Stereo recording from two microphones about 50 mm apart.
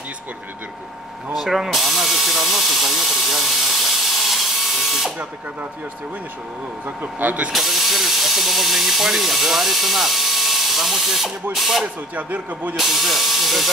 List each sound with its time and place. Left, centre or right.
1.3 s tools: centre
7.0 s speech: right
7.5 s speech: centre
11.8 s speech: right
12.7 s steam: centre